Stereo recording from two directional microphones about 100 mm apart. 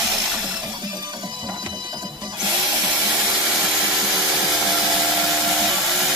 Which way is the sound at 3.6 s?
5° right (ahead or behind).